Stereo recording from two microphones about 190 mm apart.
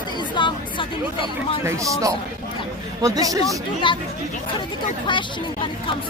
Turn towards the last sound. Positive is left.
turn(degrees=25)  # may be behind; listen again after turning